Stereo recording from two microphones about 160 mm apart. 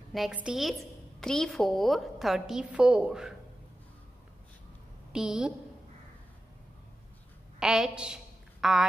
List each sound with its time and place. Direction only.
0.1 s a woman's voice: 5° right (ahead or behind)
5.1 s a woman's voice: 5° right (ahead or behind)
7.5 s a sound: 5° right (ahead or behind)